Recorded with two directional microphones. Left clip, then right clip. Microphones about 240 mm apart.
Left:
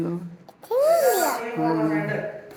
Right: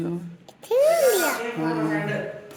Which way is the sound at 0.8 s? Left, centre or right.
Centre.